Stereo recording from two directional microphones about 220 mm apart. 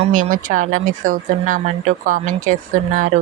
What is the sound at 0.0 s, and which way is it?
Speech, 35° right (ahead or behind).